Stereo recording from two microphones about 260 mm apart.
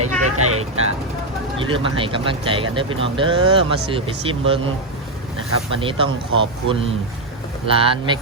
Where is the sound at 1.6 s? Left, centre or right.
Centre.